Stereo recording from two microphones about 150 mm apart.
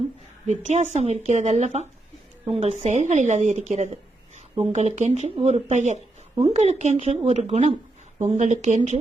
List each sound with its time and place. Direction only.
0.4 s speech: 55° right (ahead or behind)